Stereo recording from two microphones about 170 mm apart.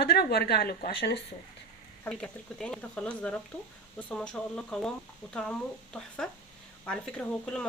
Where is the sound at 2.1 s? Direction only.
5° left (ahead or behind).